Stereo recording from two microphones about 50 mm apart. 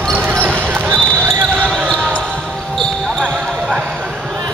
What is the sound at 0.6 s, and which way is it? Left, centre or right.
Basketball bounce, right.